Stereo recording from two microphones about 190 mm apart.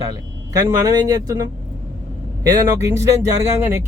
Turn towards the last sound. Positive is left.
turn(degrees=-15)  # may be behind; listen again after turning